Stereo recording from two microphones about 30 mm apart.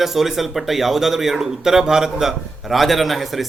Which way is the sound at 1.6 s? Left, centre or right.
Centre.